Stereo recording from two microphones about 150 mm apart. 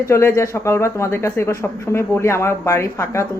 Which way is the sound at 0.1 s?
20° left (ahead or behind).